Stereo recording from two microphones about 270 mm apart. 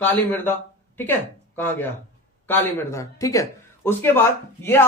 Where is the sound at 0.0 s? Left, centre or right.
Centre.